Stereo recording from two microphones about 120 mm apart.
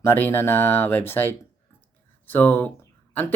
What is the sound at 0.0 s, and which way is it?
Speech, 20° left (ahead or behind).